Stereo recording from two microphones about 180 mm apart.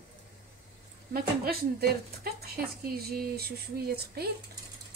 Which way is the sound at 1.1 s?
55° right (ahead or behind).